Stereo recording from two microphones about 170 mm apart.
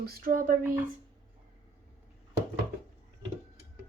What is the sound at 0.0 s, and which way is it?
Speech, 60° right (ahead or behind).